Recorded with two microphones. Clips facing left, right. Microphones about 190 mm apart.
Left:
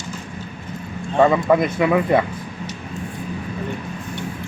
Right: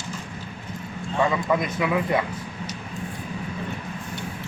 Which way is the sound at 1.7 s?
55° left (ahead or behind).